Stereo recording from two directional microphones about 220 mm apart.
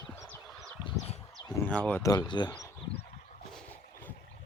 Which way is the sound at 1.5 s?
5° left (ahead or behind).